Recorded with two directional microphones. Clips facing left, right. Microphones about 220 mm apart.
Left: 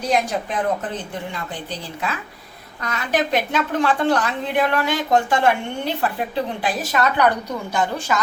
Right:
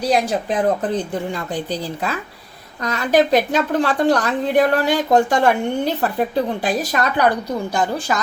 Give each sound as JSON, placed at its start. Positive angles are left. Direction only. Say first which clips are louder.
{"t": 0.0, "sound": "a woman's voice", "louder": "right 3 dB", "side_deg": -35}